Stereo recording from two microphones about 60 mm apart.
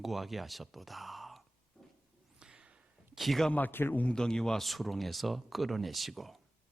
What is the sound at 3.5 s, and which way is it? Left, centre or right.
Speech, left.